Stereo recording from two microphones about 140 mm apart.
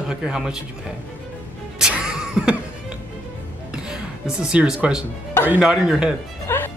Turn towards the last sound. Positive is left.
turn(degrees=15)  # may be behind; listen again after turning